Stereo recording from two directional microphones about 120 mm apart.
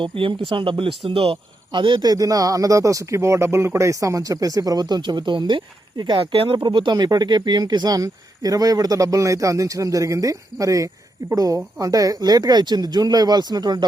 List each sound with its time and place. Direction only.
0.0 s speech: 45° right (ahead or behind)